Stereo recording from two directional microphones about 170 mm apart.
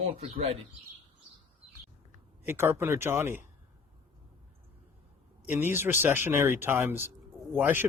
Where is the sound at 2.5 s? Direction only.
15° right (ahead or behind).